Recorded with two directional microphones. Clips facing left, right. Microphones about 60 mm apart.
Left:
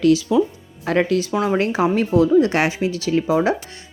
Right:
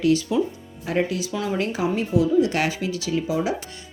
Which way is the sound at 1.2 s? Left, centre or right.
Left.